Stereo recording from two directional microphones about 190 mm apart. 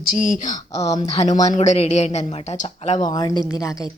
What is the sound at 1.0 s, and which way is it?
A woman's voice, 40° left (ahead or behind).